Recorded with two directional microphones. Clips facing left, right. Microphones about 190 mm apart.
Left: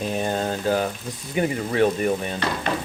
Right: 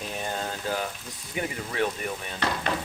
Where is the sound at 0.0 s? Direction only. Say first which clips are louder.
Left 8 dB; 40° left (ahead or behind).